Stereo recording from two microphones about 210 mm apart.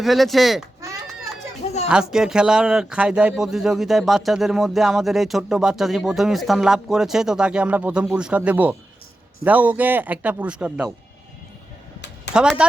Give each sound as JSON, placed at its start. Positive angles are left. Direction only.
{"t": 0.0, "sound": "speech", "side_deg": 0}
{"t": 1.9, "sound": "a man's voice", "side_deg": -5}
{"t": 12.3, "sound": "speech", "side_deg": -5}